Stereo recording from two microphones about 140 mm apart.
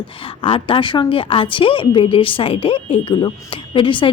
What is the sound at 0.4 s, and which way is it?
Speech, 40° left (ahead or behind).